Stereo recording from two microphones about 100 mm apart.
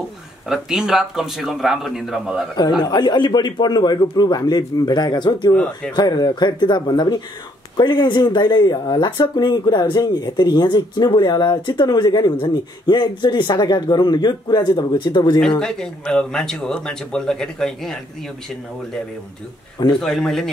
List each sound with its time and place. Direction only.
0.5 s speech: 5° right (ahead or behind)
2.8 s speech: 45° left (ahead or behind)
5.5 s speech: 10° left (ahead or behind)
5.9 s speech: 45° left (ahead or behind)
15.6 s speech: 5° left (ahead or behind)
20.0 s speech: 5° left (ahead or behind)